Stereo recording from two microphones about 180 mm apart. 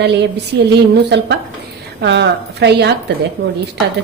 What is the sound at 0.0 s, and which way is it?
A woman's voice, 70° right (ahead or behind).